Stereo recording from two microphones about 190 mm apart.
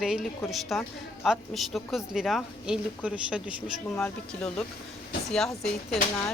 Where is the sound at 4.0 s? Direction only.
5° left (ahead or behind).